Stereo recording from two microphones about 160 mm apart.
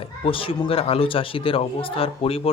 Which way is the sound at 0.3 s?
35° left (ahead or behind).